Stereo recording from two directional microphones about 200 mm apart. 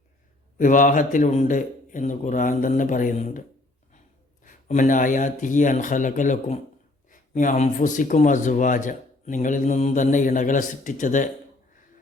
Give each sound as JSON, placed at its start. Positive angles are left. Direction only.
{"t": 0.6, "sound": "speech", "side_deg": 40}
{"t": 4.4, "sound": "speech", "side_deg": 40}